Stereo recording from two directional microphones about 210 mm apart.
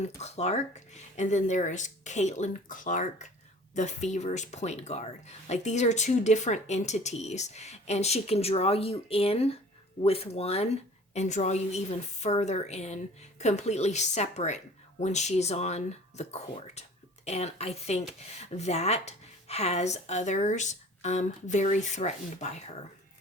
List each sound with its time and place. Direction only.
0.0 s speech: 30° left (ahead or behind)